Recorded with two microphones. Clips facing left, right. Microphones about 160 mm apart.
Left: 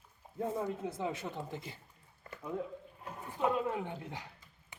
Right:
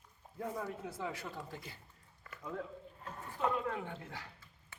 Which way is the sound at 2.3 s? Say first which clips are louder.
Left 5 dB; 30° left (ahead or behind).